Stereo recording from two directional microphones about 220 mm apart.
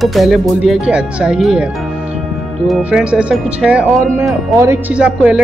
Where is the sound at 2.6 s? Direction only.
5° right (ahead or behind).